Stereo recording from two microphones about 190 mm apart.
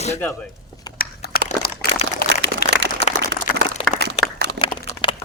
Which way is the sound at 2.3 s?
70° right (ahead or behind).